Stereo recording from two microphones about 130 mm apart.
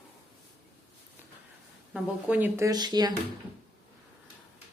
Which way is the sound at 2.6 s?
30° right (ahead or behind).